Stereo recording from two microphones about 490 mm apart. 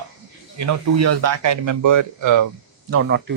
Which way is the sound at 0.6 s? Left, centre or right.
Right.